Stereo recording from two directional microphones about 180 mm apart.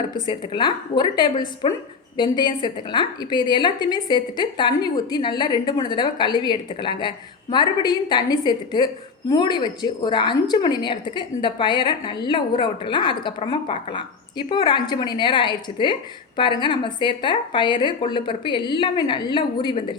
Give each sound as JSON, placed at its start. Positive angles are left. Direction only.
{"t": 0.3, "sound": "a woman's voice", "side_deg": 25}